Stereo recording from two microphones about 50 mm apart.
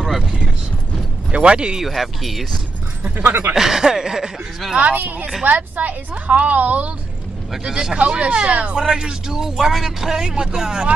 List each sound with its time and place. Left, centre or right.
0.0 s a sound: centre
1.3 s speech: right
1.8 s speech: centre
3.2 s speech: right
3.5 s a man's voice: centre
4.7 s a woman's voice: right
7.6 s speech: centre
8.7 s a man's voice: centre
9.7 s a man's voice: centre